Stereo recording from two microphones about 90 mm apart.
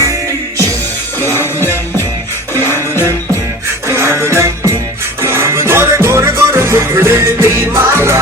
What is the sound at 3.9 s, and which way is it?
Music, 30° right (ahead or behind).